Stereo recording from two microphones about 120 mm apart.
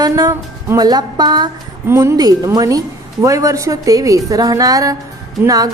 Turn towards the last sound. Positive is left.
turn(degrees=-30)  # may be behind; listen again after turning